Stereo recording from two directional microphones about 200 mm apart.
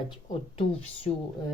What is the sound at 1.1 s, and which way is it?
Speech, 30° left (ahead or behind).